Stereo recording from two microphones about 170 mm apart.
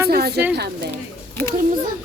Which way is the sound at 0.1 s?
65° right (ahead or behind).